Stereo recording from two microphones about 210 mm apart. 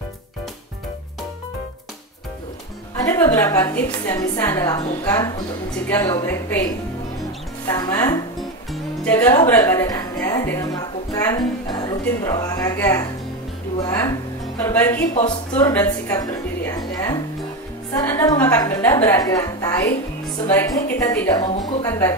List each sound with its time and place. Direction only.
3.0 s a woman's voice: 10° left (ahead or behind)
7.6 s a woman's voice: 20° left (ahead or behind)
8.4 s music: 5° left (ahead or behind)
11.2 s a woman's voice: 20° left (ahead or behind)
14.6 s a woman's voice: 10° left (ahead or behind)
15.6 s music: 15° left (ahead or behind)
17.9 s a woman's voice: 15° left (ahead or behind)